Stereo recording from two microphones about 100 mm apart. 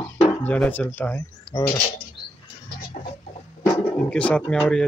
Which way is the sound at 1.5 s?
45° left (ahead or behind).